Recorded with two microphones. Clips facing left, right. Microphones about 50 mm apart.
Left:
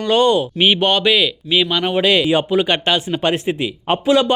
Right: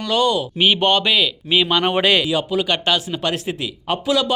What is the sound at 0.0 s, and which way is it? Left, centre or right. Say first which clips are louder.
Speech: left 4 dB; left.